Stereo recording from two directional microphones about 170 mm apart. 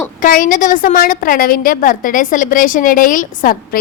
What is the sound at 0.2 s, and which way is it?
A woman's voice, 55° left (ahead or behind).